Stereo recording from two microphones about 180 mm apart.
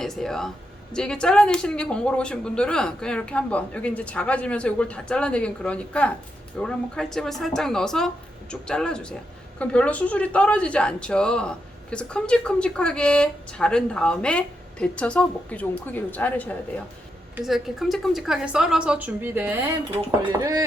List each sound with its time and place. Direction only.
0.0 s speech: centre (ahead or behind)
17.3 s speech: centre (ahead or behind); by 20.7 s 15° right (ahead or behind)